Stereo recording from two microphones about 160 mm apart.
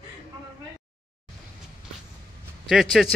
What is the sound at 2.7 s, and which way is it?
Speech, centre (ahead or behind).